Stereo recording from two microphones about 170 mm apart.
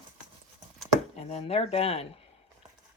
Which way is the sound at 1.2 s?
35° left (ahead or behind).